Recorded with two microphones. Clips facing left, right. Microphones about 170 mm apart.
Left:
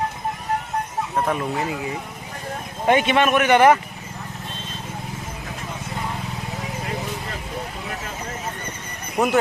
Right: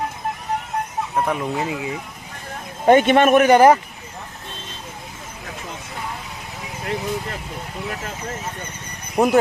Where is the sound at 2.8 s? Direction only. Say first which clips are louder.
Right 5 dB; 45° right (ahead or behind).